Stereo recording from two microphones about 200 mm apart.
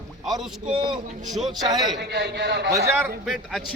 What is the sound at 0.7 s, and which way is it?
Speech, 25° right (ahead or behind).